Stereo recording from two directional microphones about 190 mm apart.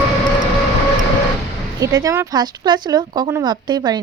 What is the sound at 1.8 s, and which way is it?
Speech, 15° right (ahead or behind).